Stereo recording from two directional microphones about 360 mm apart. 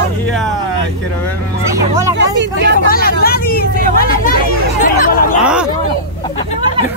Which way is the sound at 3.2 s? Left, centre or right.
Left.